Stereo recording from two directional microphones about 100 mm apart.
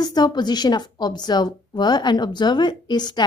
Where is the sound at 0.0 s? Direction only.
45° left (ahead or behind).